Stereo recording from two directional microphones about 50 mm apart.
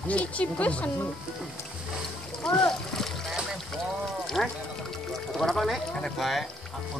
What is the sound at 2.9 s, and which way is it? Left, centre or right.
Splash, centre.